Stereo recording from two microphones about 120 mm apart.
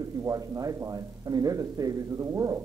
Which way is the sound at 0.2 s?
30° right (ahead or behind).